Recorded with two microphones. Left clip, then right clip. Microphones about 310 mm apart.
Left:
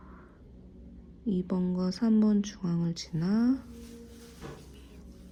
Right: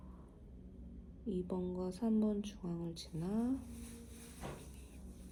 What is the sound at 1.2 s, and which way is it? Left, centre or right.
Speech, left.